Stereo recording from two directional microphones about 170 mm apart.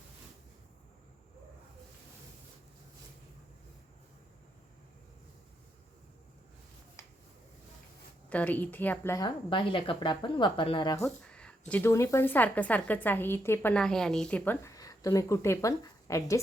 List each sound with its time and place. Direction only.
8.3 s a woman's voice: 10° left (ahead or behind)
11.3 s a woman's voice: 5° left (ahead or behind)